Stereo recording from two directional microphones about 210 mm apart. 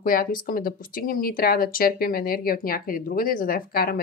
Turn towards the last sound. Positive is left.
turn(degrees=45)  # may be behind; listen again after turning